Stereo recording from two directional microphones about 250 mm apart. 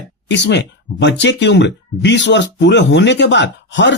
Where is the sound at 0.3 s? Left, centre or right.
Left.